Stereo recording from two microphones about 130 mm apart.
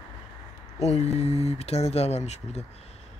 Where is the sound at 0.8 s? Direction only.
55° left (ahead or behind).